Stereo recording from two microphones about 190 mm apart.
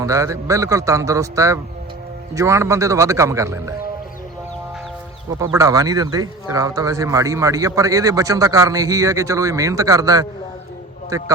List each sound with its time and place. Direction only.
0.0 s a man's voice: 15° right (ahead or behind)
5.5 s a man's voice: 20° right (ahead or behind)